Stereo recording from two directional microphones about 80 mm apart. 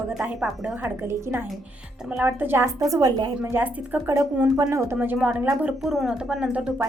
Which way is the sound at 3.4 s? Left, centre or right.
Right.